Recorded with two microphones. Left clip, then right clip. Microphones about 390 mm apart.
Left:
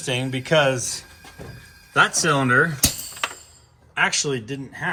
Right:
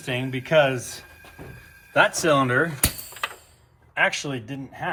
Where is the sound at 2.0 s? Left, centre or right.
Centre.